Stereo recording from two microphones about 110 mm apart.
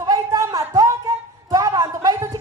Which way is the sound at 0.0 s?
30° right (ahead or behind).